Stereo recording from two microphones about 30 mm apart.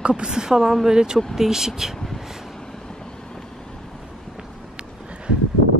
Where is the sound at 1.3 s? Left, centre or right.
Centre.